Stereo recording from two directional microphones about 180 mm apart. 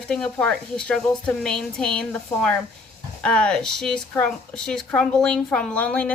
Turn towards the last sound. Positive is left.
turn(degrees=5)  # may be behind; listen again after turning